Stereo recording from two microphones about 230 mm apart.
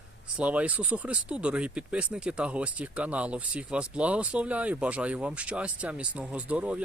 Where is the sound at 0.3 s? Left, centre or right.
Centre.